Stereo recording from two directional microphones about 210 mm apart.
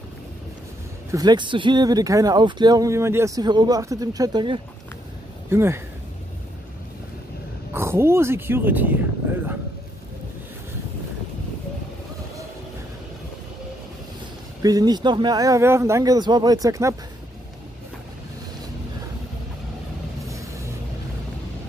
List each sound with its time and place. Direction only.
1.1 s speech: 20° right (ahead or behind)
7.7 s speech: 10° right (ahead or behind)
14.6 s speech: 15° right (ahead or behind)
20.2 s vehicle: 15° right (ahead or behind)